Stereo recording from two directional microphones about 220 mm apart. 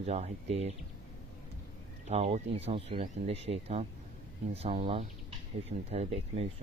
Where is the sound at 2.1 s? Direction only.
25° right (ahead or behind).